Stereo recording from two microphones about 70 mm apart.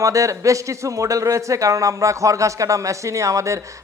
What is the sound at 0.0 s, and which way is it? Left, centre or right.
Speech, right.